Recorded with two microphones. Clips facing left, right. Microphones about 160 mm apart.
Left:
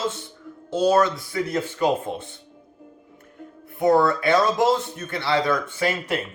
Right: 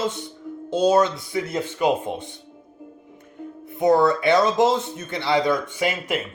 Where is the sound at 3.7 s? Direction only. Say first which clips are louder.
Right 1 dB; 20° right (ahead or behind).